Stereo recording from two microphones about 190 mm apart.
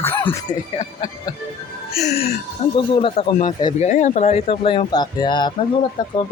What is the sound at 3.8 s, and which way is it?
Speech, 40° left (ahead or behind).